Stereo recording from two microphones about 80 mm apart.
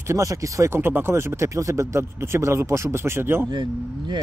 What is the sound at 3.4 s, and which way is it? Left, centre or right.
Speech, right.